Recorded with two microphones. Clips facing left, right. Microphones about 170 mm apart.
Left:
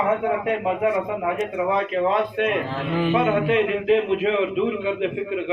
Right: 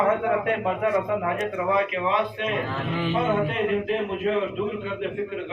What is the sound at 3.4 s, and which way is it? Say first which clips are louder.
Speech: left 5 dB; 90° left.